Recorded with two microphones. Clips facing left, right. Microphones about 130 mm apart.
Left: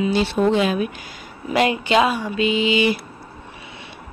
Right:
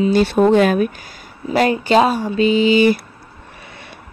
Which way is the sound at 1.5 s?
40° right (ahead or behind).